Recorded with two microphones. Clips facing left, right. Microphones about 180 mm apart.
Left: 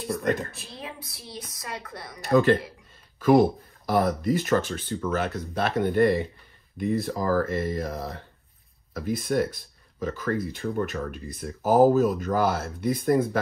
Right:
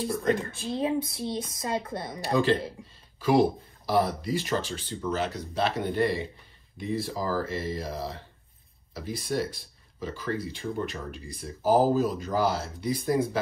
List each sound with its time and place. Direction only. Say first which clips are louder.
0.5 s speech: right 12 dB; 25° right (ahead or behind)
3.2 s speech: left 4 dB; 50° left (ahead or behind)